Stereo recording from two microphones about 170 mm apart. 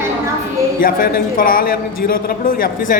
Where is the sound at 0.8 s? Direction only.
55° left (ahead or behind).